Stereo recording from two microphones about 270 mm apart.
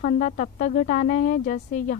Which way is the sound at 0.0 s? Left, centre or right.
Left.